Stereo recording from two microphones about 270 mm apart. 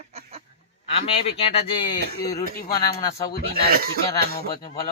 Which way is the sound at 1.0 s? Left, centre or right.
Left.